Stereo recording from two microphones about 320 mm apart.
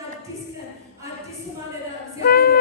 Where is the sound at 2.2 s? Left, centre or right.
Left.